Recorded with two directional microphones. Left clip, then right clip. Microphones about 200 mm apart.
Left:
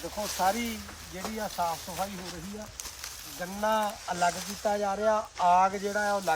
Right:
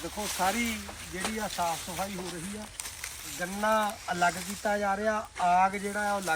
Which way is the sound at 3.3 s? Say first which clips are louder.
Right 1 dB; 20° left (ahead or behind).